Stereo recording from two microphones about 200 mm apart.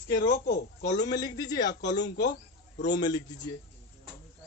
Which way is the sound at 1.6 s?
60° left (ahead or behind).